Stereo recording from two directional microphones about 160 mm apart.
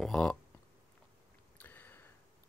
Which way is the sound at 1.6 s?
10° left (ahead or behind).